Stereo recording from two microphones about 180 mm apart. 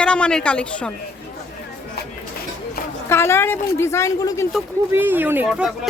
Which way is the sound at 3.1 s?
15° left (ahead or behind).